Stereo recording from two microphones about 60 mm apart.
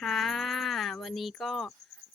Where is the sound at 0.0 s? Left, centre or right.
Centre.